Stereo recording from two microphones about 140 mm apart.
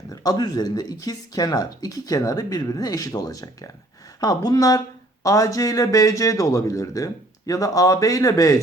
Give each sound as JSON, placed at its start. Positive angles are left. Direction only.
{"t": 0.1, "sound": "speech", "side_deg": 25}